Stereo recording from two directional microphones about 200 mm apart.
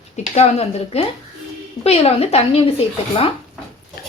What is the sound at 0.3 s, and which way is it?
Speech, 30° left (ahead or behind).